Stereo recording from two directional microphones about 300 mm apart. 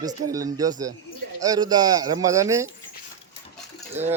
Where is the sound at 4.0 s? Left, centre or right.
Centre.